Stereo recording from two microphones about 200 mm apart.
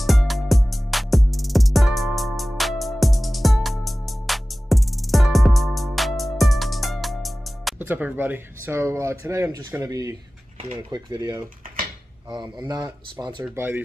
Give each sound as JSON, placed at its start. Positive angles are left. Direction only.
{"t": 0.0, "sound": "music", "side_deg": 0}
{"t": 7.8, "sound": "speech", "side_deg": -10}